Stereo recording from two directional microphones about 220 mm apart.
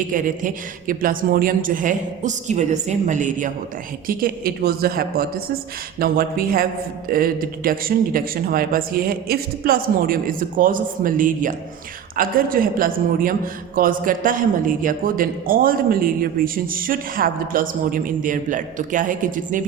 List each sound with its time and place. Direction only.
0.1 s a man's voice: 35° right (ahead or behind)